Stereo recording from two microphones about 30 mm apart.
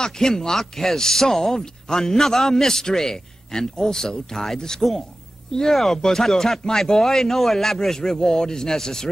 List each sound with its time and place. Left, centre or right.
0.0 s a man's voice: centre